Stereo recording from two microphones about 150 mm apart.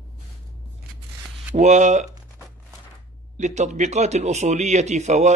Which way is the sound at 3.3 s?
50° right (ahead or behind).